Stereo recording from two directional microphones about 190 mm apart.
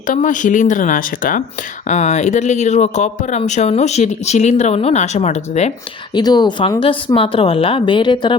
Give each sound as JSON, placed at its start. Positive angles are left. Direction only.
{"t": 0.1, "sound": "speech", "side_deg": 40}
{"t": 6.1, "sound": "speech", "side_deg": 20}